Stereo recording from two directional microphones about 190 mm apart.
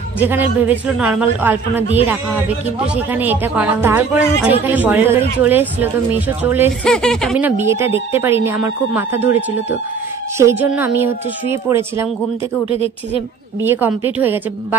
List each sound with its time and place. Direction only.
0.2 s speech: 10° right (ahead or behind)
2.9 s speech: 10° right (ahead or behind)
6.8 s speech: 5° left (ahead or behind)
7.3 s speech: 10° right (ahead or behind)
12.6 s speech: 30° left (ahead or behind)
13.6 s speech: 10° right (ahead or behind)